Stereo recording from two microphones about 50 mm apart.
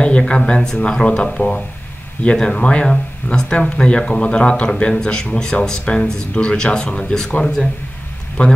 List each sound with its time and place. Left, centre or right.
0.0 s speech: centre
8.4 s speech: left